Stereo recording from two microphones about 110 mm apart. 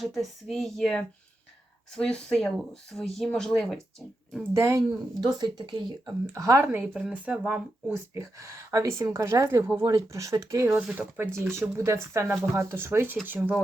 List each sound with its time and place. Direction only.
0.0 s speech: centre (ahead or behind)
4.5 s speech: 25° right (ahead or behind)
5.4 s speech: 45° right (ahead or behind)
6.2 s speech: 30° right (ahead or behind); by 7.9 s 10° right (ahead or behind)
8.1 s speech: 30° right (ahead or behind)
10.8 s speech: 10° right (ahead or behind)
11.3 s speech: 25° right (ahead or behind)